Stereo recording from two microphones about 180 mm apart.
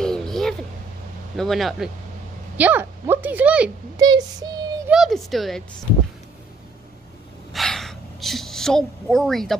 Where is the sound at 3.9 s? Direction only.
20° right (ahead or behind).